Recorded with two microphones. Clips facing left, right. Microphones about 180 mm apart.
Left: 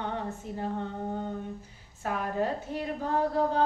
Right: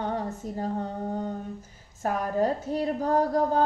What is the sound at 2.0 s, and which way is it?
A woman's voice, 40° right (ahead or behind).